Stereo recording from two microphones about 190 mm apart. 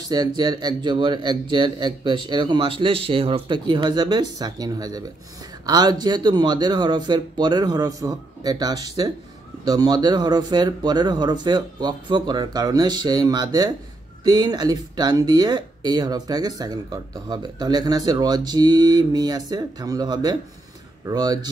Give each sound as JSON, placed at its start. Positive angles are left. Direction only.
{"t": 0.1, "sound": "speech", "side_deg": -20}